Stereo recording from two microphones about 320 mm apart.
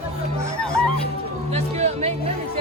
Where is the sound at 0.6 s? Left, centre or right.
Centre.